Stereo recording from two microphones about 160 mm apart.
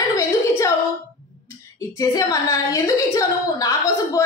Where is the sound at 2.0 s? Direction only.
20° left (ahead or behind).